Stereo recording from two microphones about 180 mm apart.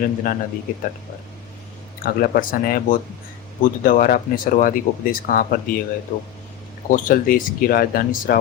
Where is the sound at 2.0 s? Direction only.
55° left (ahead or behind).